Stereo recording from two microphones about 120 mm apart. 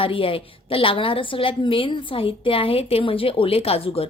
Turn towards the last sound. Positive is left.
turn(degrees=55)  # may be behind; listen again after turning